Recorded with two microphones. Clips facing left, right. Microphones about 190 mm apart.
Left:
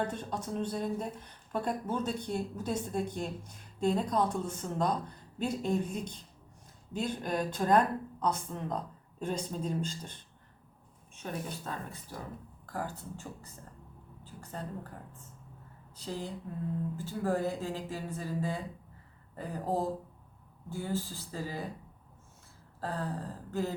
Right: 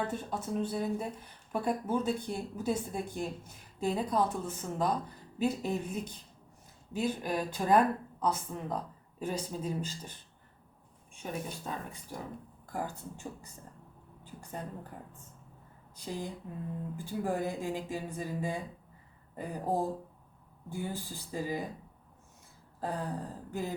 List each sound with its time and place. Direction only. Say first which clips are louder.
0.1 s a woman's voice: right 1 dB; 5° right (ahead or behind)
16.0 s a woman's voice: even; 15° right (ahead or behind)
22.8 s a woman's voice: right 1 dB; 15° right (ahead or behind)